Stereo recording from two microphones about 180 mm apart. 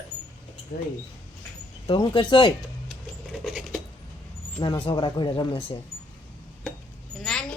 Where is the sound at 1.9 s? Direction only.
30° left (ahead or behind).